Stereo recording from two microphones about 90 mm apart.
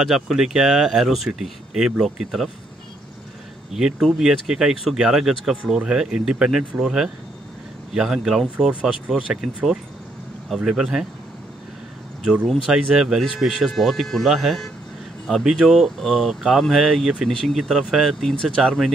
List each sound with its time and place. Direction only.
0.0 s speech: 5° right (ahead or behind)
3.7 s speech: 5° right (ahead or behind)
10.5 s speech: 5° right (ahead or behind)
12.4 s speech: 5° right (ahead or behind)